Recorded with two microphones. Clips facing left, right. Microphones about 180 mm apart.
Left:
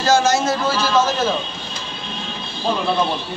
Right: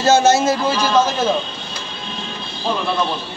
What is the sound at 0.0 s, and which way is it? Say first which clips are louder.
Speech: right 3 dB; 25° right (ahead or behind).